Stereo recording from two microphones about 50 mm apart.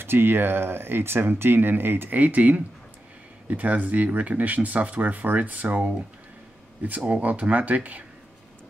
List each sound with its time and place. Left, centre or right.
0.0 s speech: right
7.1 s speech: right